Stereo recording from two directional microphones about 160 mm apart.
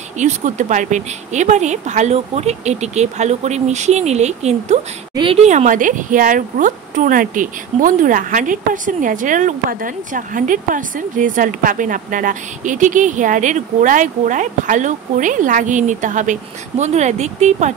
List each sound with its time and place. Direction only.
0.2 s speech: 50° right (ahead or behind)